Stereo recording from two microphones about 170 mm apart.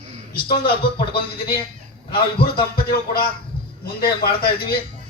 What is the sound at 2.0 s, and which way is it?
Speech, 65° left (ahead or behind).